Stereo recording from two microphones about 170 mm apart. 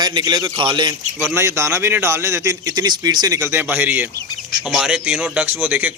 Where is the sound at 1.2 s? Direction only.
10° right (ahead or behind).